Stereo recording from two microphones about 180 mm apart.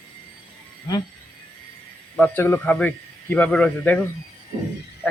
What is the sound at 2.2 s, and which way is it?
A man's voice, 10° left (ahead or behind).